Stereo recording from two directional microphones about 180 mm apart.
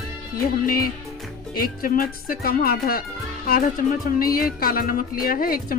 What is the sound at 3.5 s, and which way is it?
Music, 55° left (ahead or behind).